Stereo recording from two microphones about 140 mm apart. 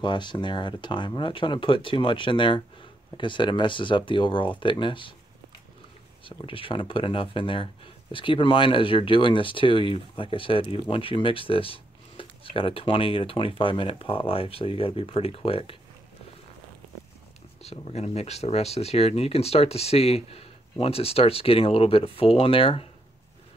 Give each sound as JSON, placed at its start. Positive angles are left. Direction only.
{"t": 0.0, "sound": "speech", "side_deg": 35}
{"t": 6.2, "sound": "speech", "side_deg": 40}
{"t": 17.6, "sound": "speech", "side_deg": 50}